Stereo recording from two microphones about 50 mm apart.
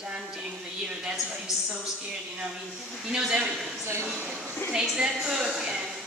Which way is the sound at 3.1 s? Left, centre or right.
Centre.